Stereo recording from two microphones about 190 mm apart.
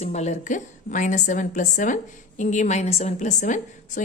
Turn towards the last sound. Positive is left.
turn(degrees=40)  # may be behind; listen again after turning